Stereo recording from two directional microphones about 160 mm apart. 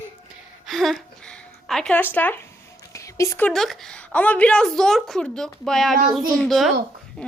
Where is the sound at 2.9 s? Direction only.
20° left (ahead or behind).